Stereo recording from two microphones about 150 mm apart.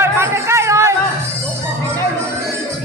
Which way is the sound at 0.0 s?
15° right (ahead or behind).